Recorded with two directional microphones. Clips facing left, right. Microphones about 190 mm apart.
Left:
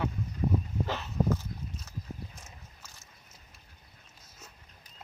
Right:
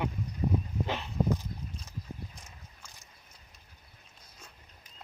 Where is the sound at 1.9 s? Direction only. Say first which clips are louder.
Left 1 dB; 15° right (ahead or behind).